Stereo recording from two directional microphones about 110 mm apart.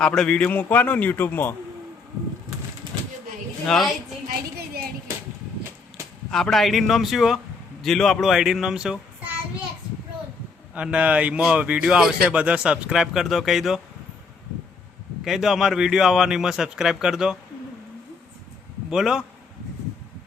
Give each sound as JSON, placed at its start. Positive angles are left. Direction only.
{"t": 0.0, "sound": "a man's voice", "side_deg": 5}
{"t": 3.7, "sound": "speech", "side_deg": 0}
{"t": 6.3, "sound": "a child's voice", "side_deg": 5}
{"t": 10.8, "sound": "speech", "side_deg": -10}
{"t": 15.2, "sound": "speech", "side_deg": -5}
{"t": 18.9, "sound": "speech", "side_deg": -5}